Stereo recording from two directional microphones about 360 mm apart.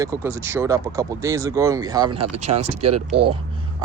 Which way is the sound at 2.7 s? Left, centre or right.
Right.